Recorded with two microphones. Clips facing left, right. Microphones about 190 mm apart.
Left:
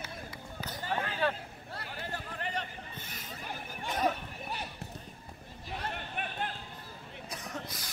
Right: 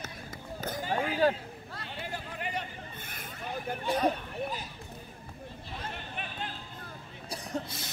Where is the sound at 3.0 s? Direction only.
55° right (ahead or behind).